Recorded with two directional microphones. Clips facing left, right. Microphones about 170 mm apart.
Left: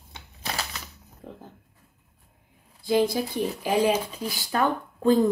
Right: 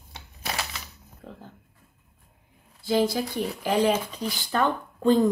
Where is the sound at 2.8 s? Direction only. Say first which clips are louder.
Left 1 dB; 15° left (ahead or behind).